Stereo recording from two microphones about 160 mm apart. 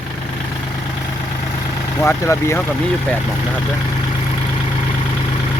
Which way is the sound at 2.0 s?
15° left (ahead or behind).